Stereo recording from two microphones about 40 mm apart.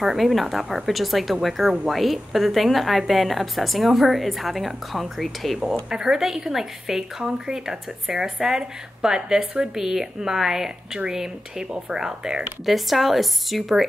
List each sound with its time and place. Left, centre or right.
0.0 s a woman's voice: centre
5.9 s a woman's voice: centre
12.6 s a woman's voice: centre